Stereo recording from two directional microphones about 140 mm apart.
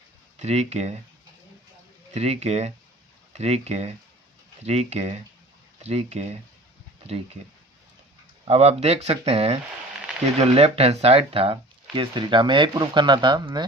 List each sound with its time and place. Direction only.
0.3 s speech: 50° right (ahead or behind)
2.1 s speech: 50° right (ahead or behind)
8.4 s speech: 50° right (ahead or behind)